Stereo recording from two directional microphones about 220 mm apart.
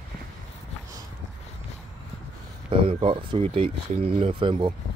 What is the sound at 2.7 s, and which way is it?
Speech, 25° right (ahead or behind).